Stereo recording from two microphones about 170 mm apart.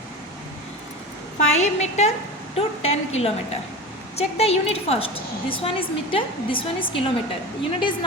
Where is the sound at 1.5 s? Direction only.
40° left (ahead or behind).